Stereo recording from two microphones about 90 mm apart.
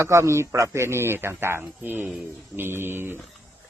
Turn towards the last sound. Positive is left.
turn(degrees=-25)  # may be behind; listen again after turning